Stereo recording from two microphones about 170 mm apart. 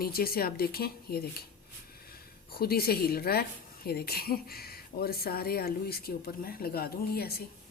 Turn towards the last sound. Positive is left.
turn(degrees=65)  # may be behind; listen again after turning